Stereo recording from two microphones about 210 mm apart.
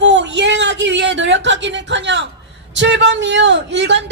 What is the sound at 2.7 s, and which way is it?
Speech, 60° right (ahead or behind).